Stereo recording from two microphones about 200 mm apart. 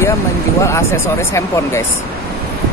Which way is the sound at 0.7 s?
15° left (ahead or behind).